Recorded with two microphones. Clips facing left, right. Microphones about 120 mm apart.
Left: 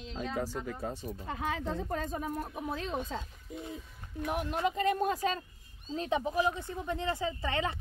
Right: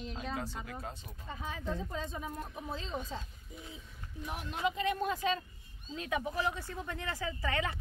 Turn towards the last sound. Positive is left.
turn(degrees=25)  # may be behind; listen again after turning